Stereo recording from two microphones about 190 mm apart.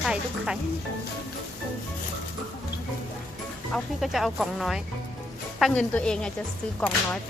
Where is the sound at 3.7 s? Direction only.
Centre (ahead or behind).